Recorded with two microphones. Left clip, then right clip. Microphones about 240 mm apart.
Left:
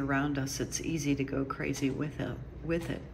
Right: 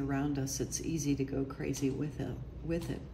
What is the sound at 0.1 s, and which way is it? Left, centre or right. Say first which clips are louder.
Speech: left 4 dB; centre.